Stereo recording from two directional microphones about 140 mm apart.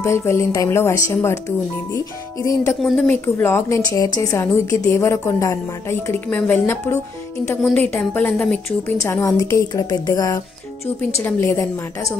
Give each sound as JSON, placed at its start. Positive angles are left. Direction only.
{"t": 0.0, "sound": "a woman's voice", "side_deg": 20}
{"t": 2.8, "sound": "a woman's voice", "side_deg": 10}
{"t": 9.0, "sound": "a woman's voice", "side_deg": 20}